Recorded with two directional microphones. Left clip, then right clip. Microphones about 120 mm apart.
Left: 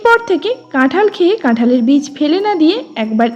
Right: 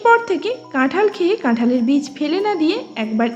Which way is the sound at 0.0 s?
40° left (ahead or behind).